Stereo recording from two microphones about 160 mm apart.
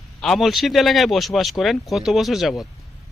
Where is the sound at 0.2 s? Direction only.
Centre (ahead or behind).